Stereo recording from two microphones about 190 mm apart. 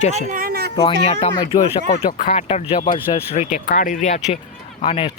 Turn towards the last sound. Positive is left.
turn(degrees=30)  # may be behind; listen again after turning